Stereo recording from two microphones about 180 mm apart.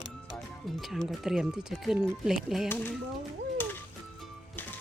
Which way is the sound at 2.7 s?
10° left (ahead or behind).